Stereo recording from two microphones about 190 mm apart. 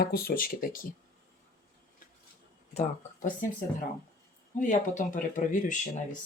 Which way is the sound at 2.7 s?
40° left (ahead or behind).